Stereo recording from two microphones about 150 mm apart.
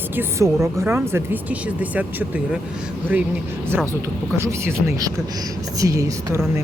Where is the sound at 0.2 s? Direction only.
20° right (ahead or behind).